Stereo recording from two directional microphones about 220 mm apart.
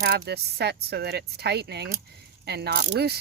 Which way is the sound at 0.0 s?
50° right (ahead or behind).